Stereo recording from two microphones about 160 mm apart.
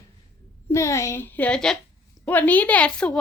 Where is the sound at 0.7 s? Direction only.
20° left (ahead or behind).